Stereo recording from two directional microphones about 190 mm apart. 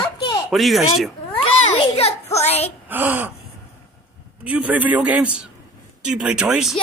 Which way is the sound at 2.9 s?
10° right (ahead or behind).